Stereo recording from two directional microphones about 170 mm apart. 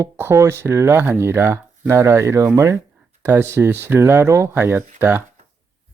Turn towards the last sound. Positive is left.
turn(degrees=-15)  # may be behind; listen again after turning